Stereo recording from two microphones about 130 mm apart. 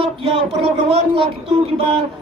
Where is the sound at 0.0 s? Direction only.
50° right (ahead or behind).